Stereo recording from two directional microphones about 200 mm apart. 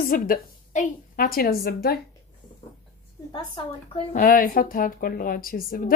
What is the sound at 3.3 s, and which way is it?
Speech, 20° left (ahead or behind).